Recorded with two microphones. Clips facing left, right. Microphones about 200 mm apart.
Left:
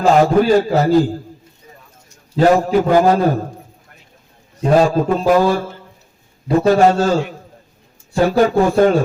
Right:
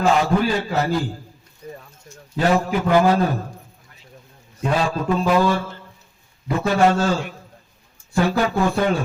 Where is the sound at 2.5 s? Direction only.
40° left (ahead or behind).